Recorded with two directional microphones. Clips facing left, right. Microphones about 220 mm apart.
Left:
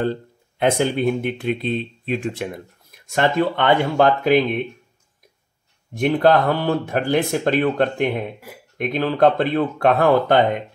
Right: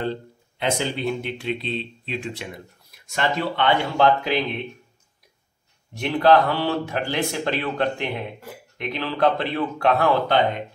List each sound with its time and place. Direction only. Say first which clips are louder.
0.0 s speech: left 4 dB; 50° left (ahead or behind)
5.9 s speech: left 2 dB; 50° left (ahead or behind)